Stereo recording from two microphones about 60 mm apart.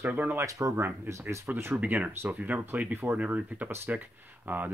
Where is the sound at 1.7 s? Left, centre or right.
Right.